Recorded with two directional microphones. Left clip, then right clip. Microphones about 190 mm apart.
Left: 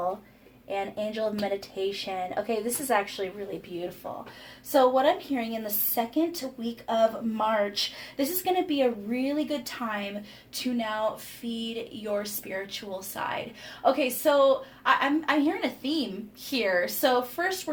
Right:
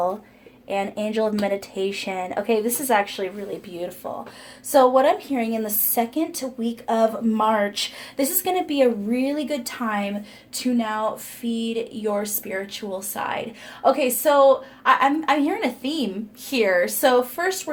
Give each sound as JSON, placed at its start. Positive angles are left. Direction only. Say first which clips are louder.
{"t": 0.7, "sound": "speech", "louder": "right 6 dB", "side_deg": -40}
{"t": 4.7, "sound": "a woman's voice", "louder": "right 6 dB", "side_deg": -50}